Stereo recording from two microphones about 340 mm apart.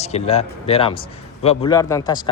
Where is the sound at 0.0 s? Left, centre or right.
Centre.